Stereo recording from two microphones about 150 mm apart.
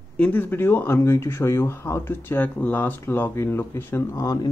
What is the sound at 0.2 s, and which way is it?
Speech, 10° left (ahead or behind).